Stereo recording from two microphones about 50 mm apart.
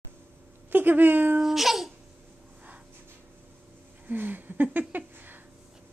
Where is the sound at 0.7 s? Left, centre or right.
Right.